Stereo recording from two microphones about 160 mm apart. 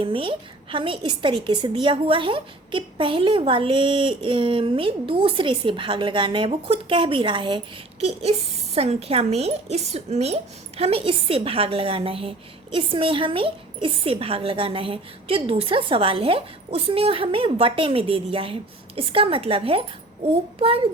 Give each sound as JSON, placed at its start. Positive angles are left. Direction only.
{"t": 0.0, "sound": "a woman's voice", "side_deg": -35}